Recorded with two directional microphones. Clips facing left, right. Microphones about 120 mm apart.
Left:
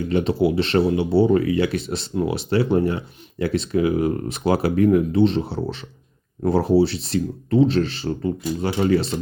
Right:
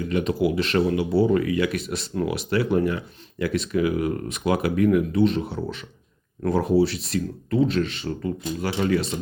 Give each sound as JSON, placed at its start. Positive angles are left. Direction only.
{"t": 0.1, "sound": "speech", "side_deg": 30}